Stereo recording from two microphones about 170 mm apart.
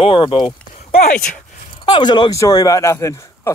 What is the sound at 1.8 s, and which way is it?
Speech, 25° left (ahead or behind).